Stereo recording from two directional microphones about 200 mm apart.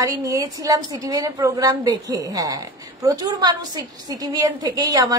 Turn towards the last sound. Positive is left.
turn(degrees=-20)  # may be behind; listen again after turning